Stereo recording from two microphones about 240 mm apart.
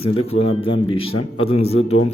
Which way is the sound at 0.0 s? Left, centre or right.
Left.